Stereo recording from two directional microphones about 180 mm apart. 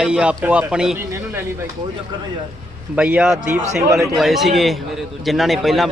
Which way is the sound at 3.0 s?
5° right (ahead or behind).